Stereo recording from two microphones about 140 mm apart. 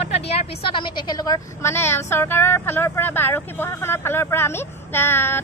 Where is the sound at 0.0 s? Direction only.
40° left (ahead or behind).